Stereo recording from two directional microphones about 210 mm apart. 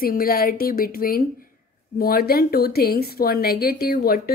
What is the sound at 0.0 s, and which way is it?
Speech, 45° left (ahead or behind).